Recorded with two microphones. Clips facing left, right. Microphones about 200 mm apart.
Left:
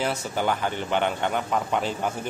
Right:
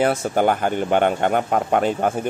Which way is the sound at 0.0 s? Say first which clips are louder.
Right 8 dB; 50° right (ahead or behind).